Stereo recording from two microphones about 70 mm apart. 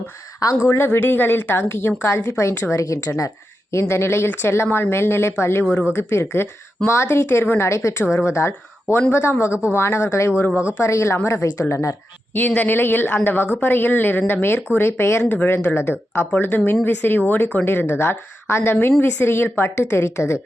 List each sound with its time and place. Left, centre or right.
0.9 s a woman's voice: left
9.5 s speech: centre
9.7 s a woman's voice: left
12.5 s a woman's voice: left